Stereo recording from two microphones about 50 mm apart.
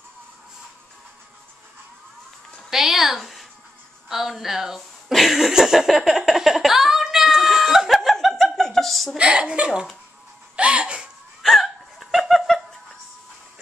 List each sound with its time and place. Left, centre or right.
2.7 s a sound: centre
9.1 s speech: centre
10.5 s music: right
11.4 s hiccup: centre